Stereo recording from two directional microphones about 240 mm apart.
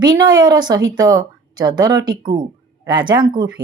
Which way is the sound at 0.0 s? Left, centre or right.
Centre.